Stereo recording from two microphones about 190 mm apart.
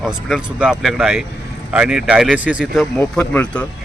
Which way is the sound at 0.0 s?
5° right (ahead or behind).